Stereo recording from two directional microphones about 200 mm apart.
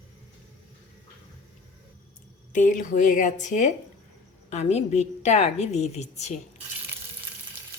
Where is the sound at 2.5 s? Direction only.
40° left (ahead or behind).